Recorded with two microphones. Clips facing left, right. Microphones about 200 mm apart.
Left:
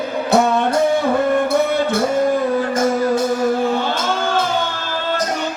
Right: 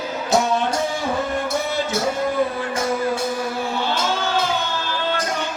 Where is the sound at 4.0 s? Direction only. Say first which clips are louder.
Left 3 dB; 50° left (ahead or behind).